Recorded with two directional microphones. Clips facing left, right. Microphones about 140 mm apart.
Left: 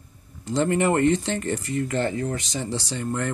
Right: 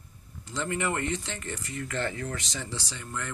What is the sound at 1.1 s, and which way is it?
Speech, 65° left (ahead or behind).